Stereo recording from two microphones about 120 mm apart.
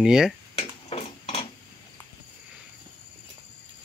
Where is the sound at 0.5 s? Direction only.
55° left (ahead or behind).